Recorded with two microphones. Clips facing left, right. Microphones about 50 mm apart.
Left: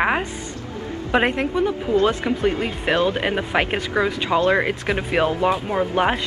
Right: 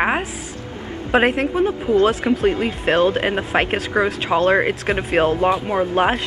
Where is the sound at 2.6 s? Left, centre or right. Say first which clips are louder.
Right 3 dB; right.